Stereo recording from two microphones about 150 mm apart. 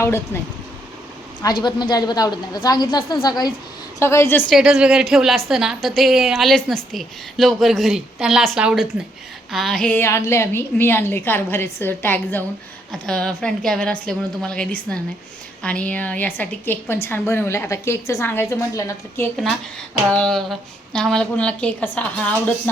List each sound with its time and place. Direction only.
0.0 s a woman's voice: 15° left (ahead or behind)
1.4 s a woman's voice: 30° left (ahead or behind)
4.0 s a woman's voice: 15° left (ahead or behind)
4.4 s a woman's voice: 5° right (ahead or behind); by 19.3 s 20° left (ahead or behind)
20.1 s a woman's voice: 5° left (ahead or behind)